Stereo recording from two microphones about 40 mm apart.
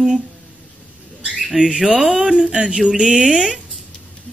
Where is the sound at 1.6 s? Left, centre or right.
Right.